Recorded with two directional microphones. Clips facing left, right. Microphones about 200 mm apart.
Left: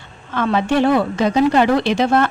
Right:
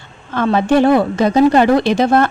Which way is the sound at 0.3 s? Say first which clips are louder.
Right 4 dB; 40° right (ahead or behind).